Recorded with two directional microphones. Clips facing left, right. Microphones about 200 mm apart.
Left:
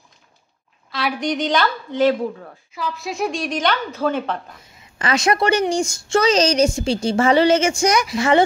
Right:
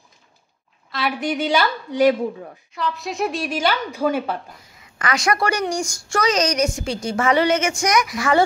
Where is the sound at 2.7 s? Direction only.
Centre (ahead or behind).